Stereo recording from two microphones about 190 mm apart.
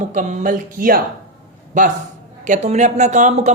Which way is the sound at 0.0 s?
40° right (ahead or behind).